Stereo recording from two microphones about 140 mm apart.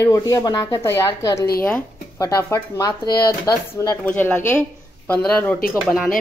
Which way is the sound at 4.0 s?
10° left (ahead or behind).